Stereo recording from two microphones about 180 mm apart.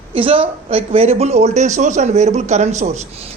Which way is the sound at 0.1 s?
30° right (ahead or behind).